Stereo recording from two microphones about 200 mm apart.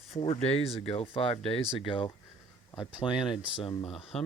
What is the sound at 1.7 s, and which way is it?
Speech, 25° left (ahead or behind).